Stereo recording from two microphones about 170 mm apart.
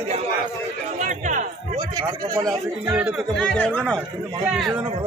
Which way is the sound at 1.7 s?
20° right (ahead or behind).